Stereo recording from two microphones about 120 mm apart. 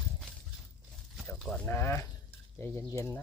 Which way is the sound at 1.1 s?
Centre (ahead or behind).